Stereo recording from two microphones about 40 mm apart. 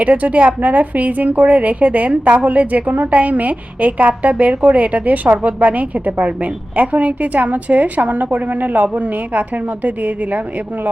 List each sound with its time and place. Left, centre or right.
0.1 s a woman's voice: right